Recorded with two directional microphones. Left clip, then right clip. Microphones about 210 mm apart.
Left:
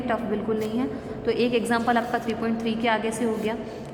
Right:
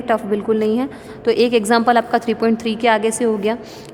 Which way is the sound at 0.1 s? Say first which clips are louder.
Right 10 dB; 50° right (ahead or behind).